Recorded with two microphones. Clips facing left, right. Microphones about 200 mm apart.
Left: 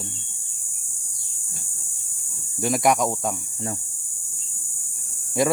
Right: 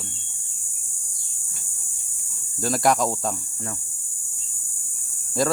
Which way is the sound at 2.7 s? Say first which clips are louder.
Even; centre (ahead or behind).